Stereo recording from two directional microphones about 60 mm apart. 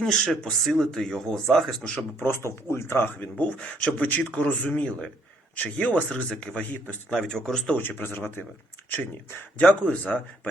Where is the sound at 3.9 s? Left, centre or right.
Left.